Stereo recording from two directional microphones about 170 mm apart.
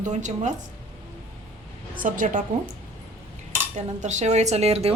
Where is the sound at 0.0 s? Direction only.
45° right (ahead or behind).